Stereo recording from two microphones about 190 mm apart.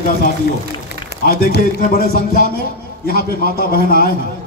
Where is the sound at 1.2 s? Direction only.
50° left (ahead or behind).